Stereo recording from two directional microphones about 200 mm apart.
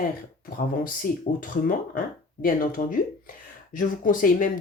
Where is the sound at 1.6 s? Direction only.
45° left (ahead or behind).